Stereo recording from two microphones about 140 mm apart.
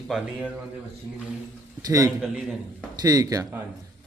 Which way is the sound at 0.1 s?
Centre (ahead or behind).